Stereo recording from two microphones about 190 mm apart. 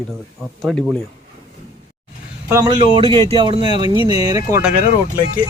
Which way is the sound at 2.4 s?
15° right (ahead or behind).